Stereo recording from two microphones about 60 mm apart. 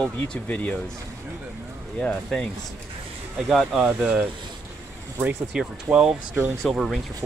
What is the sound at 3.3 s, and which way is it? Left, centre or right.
Speech, centre.